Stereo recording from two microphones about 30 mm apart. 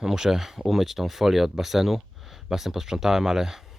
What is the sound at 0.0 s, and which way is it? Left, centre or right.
Speech, centre.